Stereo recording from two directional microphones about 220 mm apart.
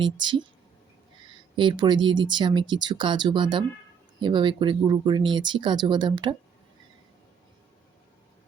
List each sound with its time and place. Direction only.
0.0 s speech: 20° right (ahead or behind)
1.5 s speech: 20° right (ahead or behind)